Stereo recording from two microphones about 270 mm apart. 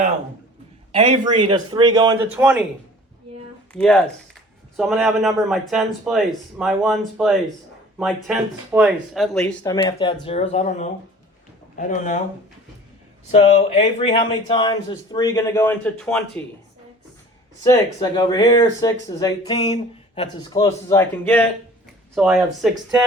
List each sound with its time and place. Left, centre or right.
0.9 s a man's voice: centre
3.7 s a man's voice: centre
9.6 s speech: centre
13.3 s speech: left; by 16.4 s centre
17.6 s a man's voice: centre